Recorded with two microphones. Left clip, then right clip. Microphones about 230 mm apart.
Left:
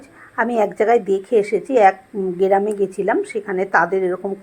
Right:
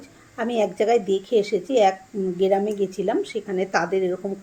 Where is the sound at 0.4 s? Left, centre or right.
Left.